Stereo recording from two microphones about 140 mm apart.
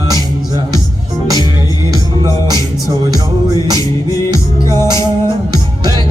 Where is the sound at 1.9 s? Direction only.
25° left (ahead or behind).